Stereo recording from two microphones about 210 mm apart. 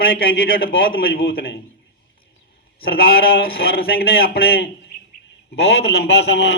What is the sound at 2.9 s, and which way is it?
A man's voice, 45° left (ahead or behind).